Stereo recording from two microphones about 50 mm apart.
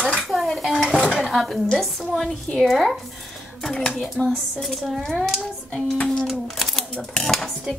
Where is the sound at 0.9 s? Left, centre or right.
Centre.